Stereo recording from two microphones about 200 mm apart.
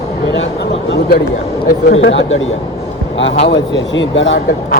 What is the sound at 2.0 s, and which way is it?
Speech, 70° left (ahead or behind).